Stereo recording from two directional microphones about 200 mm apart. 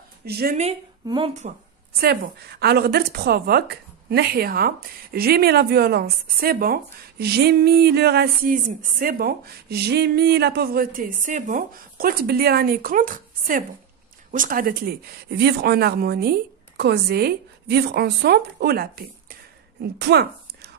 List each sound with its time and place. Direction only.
0.2 s speech: 50° right (ahead or behind)
1.0 s speech: 25° right (ahead or behind)
2.0 s a woman's voice: 50° right (ahead or behind)